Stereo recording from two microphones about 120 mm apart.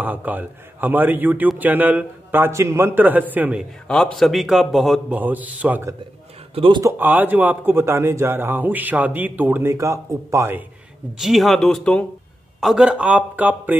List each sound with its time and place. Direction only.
0.0 s a man's voice: 15° right (ahead or behind)
3.8 s a man's voice: 5° left (ahead or behind)
5.1 s a man's voice: 15° right (ahead or behind)
6.5 s speech: 50° right (ahead or behind)
6.8 s a man's voice: 20° right (ahead or behind)
11.1 s a man's voice: centre (ahead or behind)
12.5 s a man's voice: 5° right (ahead or behind)